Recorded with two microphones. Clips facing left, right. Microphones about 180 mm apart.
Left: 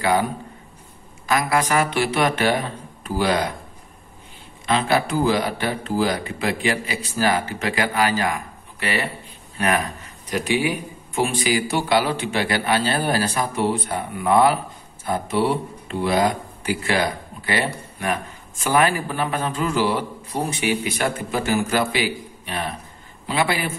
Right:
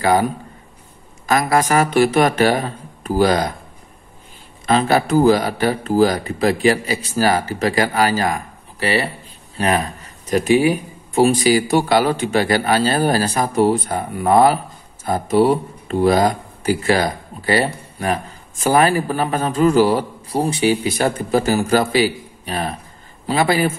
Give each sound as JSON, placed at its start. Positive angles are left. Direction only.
{"t": 0.0, "sound": "speech", "side_deg": -40}
{"t": 4.6, "sound": "speech", "side_deg": -40}
{"t": 10.3, "sound": "speech", "side_deg": -45}